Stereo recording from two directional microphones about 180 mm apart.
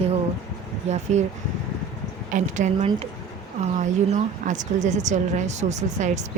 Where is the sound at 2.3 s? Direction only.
45° right (ahead or behind).